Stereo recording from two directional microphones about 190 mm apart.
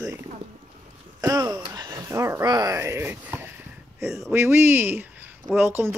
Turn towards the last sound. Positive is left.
turn(degrees=-10)  # may be behind; listen again after turning